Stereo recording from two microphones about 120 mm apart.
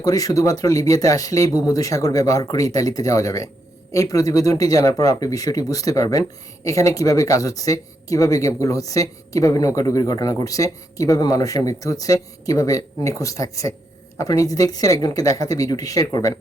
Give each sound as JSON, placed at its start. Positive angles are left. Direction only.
{"t": 0.0, "sound": "speech", "side_deg": 30}